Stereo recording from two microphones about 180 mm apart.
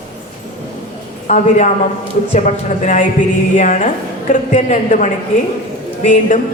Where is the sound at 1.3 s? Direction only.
40° left (ahead or behind).